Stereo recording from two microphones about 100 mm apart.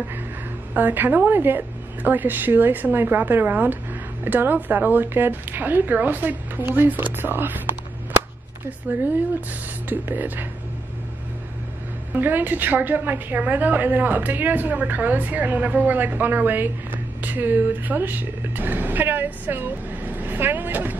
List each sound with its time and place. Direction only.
0.7 s a woman's voice: 20° right (ahead or behind)
8.6 s a woman's voice: 15° right (ahead or behind)
12.2 s a woman's voice: 20° right (ahead or behind)